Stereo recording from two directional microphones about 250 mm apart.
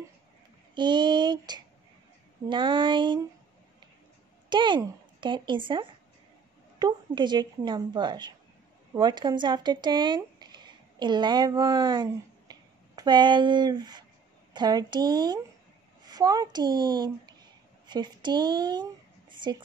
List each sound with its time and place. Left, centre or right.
0.7 s speech: centre
4.5 s speech: centre